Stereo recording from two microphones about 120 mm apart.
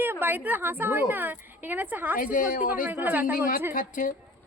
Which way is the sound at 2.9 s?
15° right (ahead or behind).